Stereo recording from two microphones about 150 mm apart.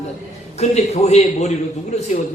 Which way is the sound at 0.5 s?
50° left (ahead or behind).